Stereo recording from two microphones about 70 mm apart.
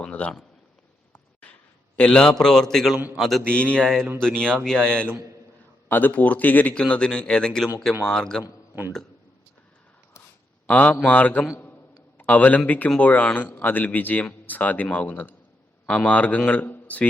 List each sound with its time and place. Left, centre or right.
0.0 s a sound: centre
2.0 s speech: centre
3.4 s speech: centre
5.9 s a man's voice: left
10.7 s a man's voice: left